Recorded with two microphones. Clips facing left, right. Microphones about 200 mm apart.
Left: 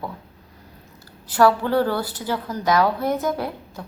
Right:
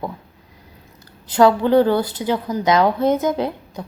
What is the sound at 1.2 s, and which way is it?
A woman's voice, 20° right (ahead or behind).